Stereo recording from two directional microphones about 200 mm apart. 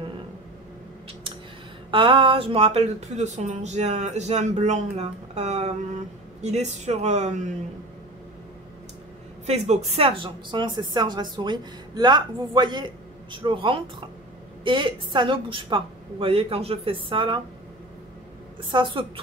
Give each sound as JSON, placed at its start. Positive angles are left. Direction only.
{"t": 1.9, "sound": "speech", "side_deg": -25}
{"t": 9.5, "sound": "speech", "side_deg": -30}
{"t": 18.6, "sound": "speech", "side_deg": -25}